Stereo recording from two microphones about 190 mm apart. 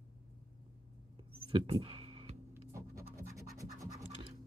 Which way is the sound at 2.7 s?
15° right (ahead or behind).